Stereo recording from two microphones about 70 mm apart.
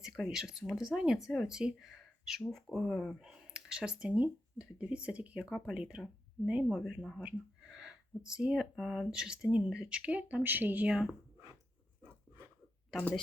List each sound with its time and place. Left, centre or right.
0.3 s speech: centre
3.2 s speech: centre
6.8 s speech: centre
9.0 s speech: centre; by 10.8 s right
10.8 s speech: centre
12.9 s speech: centre